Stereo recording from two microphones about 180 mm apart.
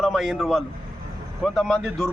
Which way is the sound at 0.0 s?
Centre (ahead or behind).